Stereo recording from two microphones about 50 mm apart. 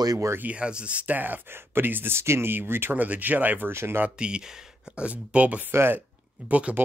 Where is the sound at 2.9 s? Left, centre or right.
Right.